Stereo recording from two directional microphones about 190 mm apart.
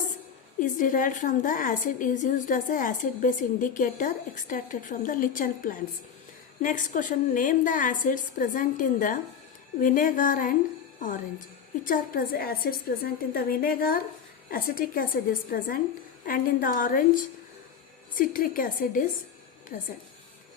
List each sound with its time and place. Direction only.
0.6 s a woman's voice: 45° left (ahead or behind)